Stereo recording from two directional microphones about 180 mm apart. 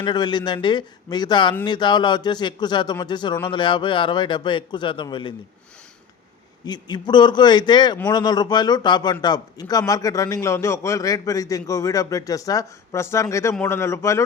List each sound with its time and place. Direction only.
0.0 s a man's voice: 25° left (ahead or behind)
6.7 s a man's voice: 25° left (ahead or behind)